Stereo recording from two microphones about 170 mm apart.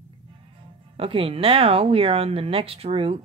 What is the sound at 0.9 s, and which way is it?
A woman's voice, 35° right (ahead or behind).